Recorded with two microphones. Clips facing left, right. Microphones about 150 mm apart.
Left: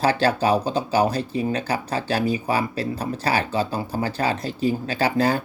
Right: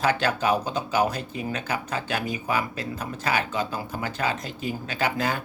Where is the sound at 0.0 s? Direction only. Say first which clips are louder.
Left 4 dB; 35° left (ahead or behind).